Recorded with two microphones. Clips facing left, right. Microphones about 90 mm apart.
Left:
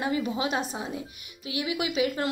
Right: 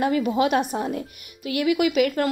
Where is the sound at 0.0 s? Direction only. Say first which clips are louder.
Right 7 dB; 50° right (ahead or behind).